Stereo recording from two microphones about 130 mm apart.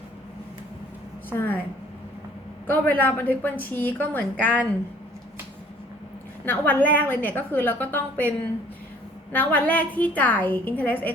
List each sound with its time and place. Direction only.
1.3 s a woman's voice: 15° left (ahead or behind)
2.6 s a woman's voice: 15° left (ahead or behind)
6.4 s a woman's voice: 15° left (ahead or behind)
9.3 s a woman's voice: 15° left (ahead or behind)